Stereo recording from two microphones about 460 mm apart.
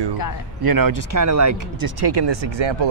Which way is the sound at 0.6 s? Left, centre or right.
Right.